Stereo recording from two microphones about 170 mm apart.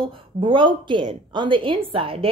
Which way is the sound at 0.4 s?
30° right (ahead or behind).